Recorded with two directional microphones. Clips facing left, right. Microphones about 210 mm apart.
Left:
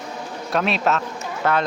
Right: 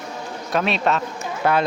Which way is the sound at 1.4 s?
10° right (ahead or behind).